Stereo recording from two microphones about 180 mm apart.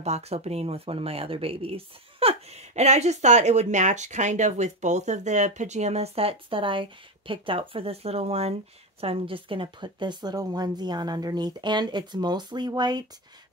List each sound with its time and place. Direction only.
0.0 s a woman's voice: 35° right (ahead or behind)